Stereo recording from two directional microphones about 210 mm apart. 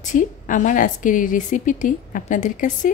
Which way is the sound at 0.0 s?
40° left (ahead or behind).